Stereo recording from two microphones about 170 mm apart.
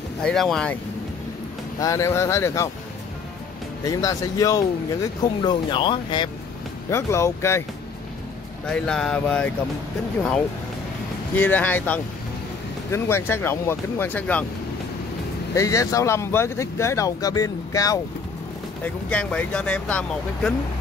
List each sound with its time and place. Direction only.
0.2 s speech: 5° left (ahead or behind)
1.8 s speech: 20° left (ahead or behind)
3.8 s speech: 20° left (ahead or behind)
6.9 s speech: 15° left (ahead or behind)
8.6 s speech: 5° left (ahead or behind)
11.3 s speech: 10° left (ahead or behind)
15.5 s speech: 20° left (ahead or behind)
19.0 s speech: 5° left (ahead or behind)